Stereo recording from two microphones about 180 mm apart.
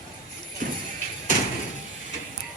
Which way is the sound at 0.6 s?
45° right (ahead or behind).